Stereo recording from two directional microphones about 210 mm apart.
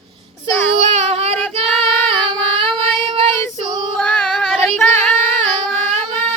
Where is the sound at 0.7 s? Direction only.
30° right (ahead or behind).